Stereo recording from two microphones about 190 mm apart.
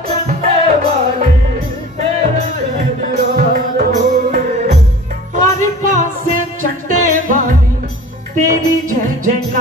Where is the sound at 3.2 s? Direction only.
45° right (ahead or behind).